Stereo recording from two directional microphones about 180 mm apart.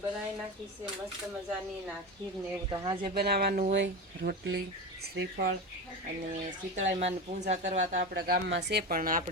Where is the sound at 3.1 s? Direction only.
60° right (ahead or behind).